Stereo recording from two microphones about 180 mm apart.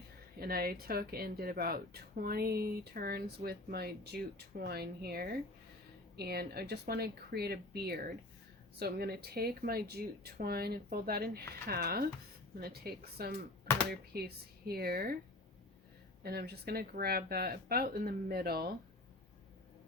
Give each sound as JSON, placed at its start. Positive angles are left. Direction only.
{"t": 0.3, "sound": "speech", "side_deg": -55}
{"t": 16.2, "sound": "speech", "side_deg": -60}